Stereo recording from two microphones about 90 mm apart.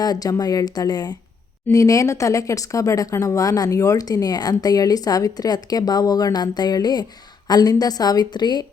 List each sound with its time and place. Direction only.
0.0 s speech: 45° left (ahead or behind)